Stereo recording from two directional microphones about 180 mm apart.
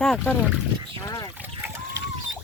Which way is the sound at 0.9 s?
20° left (ahead or behind).